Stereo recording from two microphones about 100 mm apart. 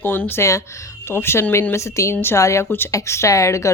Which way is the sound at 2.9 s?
30° left (ahead or behind).